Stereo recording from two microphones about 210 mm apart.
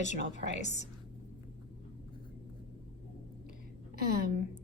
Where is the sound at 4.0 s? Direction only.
45° right (ahead or behind).